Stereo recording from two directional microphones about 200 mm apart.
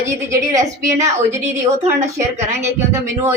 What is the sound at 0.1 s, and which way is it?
Speech, 15° right (ahead or behind).